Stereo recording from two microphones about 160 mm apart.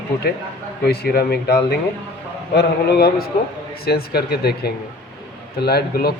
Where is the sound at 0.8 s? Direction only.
75° left (ahead or behind).